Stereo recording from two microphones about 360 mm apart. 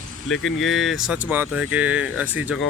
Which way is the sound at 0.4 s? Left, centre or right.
Centre.